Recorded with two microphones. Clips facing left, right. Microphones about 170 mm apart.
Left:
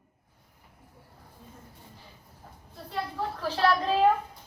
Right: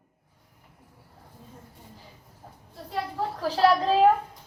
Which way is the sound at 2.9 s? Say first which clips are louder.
Right 2 dB; 40° right (ahead or behind).